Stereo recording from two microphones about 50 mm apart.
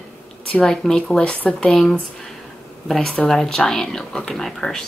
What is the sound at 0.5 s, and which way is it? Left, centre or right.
Speech, centre.